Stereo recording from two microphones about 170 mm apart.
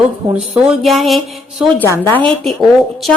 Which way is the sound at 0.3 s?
5° right (ahead or behind).